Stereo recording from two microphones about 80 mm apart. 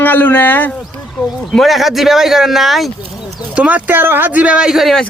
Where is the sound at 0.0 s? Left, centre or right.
Left.